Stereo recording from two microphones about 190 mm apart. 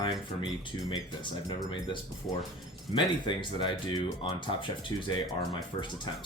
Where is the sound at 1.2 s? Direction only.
25° left (ahead or behind).